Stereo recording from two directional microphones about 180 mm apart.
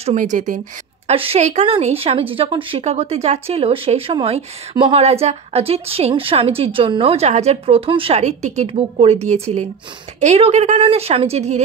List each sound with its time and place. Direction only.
0.0 s speech: 40° right (ahead or behind)
1.0 s speech: 30° right (ahead or behind)